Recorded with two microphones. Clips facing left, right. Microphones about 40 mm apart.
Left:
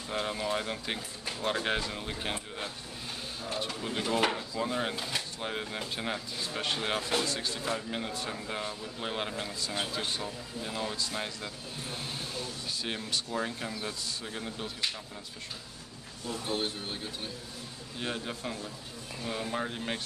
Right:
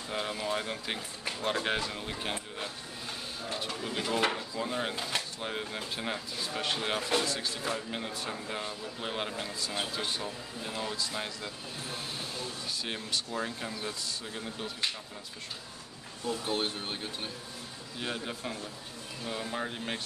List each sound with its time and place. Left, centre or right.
0.1 s speech: centre
3.5 s speech: centre
16.3 s speech: right
17.9 s speech: centre